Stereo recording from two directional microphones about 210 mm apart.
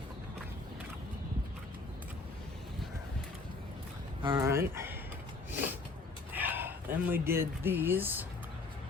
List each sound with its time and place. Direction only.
4.2 s speech: 20° right (ahead or behind)
6.3 s speech: 10° right (ahead or behind)